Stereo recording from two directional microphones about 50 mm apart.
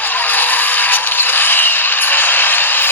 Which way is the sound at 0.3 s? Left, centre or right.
Left.